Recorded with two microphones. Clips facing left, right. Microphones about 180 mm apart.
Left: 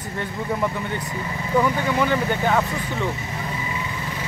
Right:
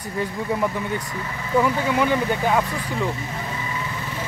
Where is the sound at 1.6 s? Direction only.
10° right (ahead or behind).